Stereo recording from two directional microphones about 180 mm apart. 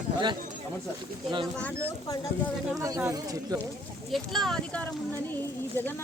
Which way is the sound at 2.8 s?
20° right (ahead or behind).